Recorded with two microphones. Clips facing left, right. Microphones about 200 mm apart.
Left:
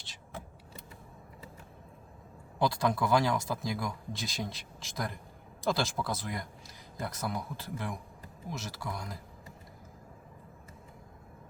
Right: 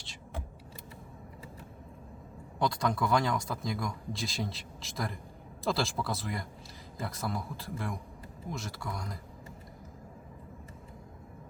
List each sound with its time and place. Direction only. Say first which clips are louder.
2.6 s speech: left 1 dB; 5° left (ahead or behind)